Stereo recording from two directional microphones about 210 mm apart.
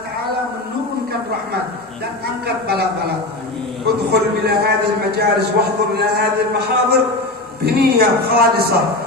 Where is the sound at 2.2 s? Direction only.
50° right (ahead or behind).